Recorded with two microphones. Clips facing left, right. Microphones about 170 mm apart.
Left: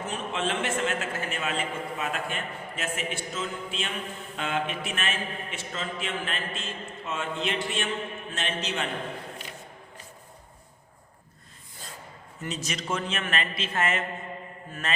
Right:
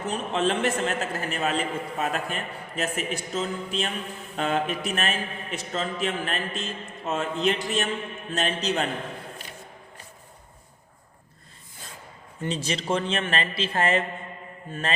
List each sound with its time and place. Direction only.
0.1 s a man's voice: 40° right (ahead or behind)
12.4 s a man's voice: 30° right (ahead or behind)